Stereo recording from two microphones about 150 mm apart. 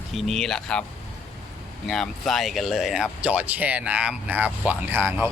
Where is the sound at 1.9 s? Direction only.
Centre (ahead or behind).